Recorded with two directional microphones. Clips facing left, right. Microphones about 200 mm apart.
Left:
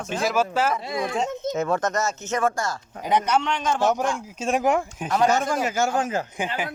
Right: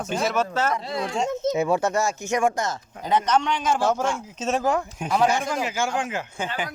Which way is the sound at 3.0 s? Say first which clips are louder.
Even; 10° left (ahead or behind).